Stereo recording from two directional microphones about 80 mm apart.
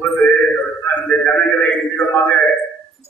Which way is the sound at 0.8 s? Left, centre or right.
Left.